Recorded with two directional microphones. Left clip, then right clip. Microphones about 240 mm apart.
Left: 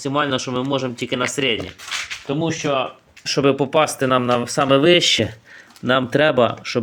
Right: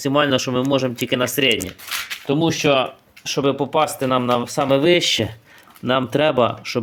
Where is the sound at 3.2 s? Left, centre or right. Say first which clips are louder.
Left 2 dB; centre.